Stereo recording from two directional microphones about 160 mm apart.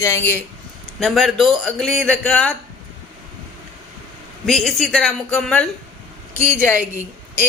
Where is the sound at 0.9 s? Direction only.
Centre (ahead or behind).